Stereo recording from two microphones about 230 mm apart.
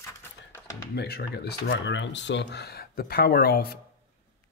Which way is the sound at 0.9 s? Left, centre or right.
Left.